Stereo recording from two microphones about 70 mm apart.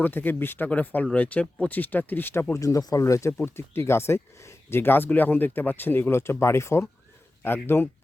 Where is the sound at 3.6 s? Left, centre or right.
Left.